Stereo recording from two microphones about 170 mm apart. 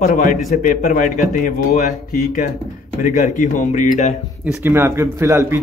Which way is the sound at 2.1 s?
55° left (ahead or behind).